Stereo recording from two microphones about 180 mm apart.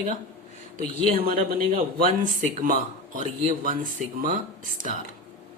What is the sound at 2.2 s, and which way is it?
Speech, 45° right (ahead or behind).